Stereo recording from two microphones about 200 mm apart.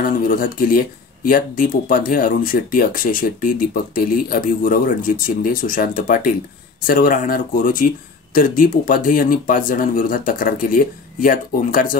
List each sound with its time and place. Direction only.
0.3 s speech: 45° left (ahead or behind)